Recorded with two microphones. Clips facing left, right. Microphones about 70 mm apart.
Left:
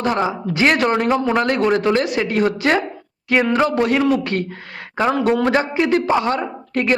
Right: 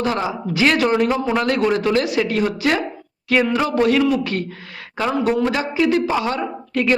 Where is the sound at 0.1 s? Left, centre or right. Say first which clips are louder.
Left 2 dB; left.